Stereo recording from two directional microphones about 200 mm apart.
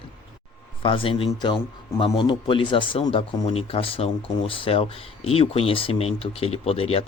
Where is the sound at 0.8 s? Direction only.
25° left (ahead or behind).